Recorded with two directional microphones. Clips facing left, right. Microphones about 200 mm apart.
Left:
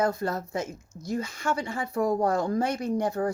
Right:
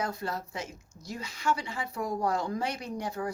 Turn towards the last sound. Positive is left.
turn(degrees=50)  # may be behind; listen again after turning